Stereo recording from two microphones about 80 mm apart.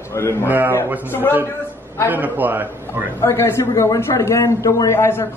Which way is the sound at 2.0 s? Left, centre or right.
Right.